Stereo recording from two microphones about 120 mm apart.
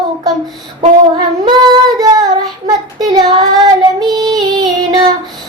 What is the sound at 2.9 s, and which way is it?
Child singing, 35° right (ahead or behind).